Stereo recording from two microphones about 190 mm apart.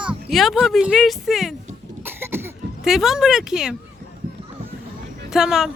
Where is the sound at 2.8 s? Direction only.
Centre (ahead or behind).